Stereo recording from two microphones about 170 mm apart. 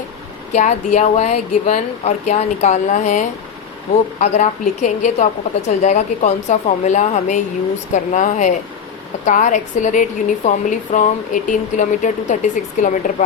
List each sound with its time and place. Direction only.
0.5 s a woman's voice: 45° left (ahead or behind)